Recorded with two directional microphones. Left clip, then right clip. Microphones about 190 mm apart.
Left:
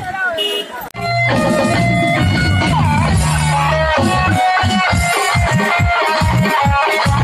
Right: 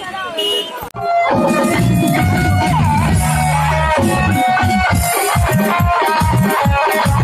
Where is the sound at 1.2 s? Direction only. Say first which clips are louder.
Left 3 dB; 30° left (ahead or behind).